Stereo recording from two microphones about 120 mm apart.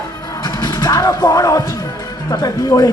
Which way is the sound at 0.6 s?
35° left (ahead or behind).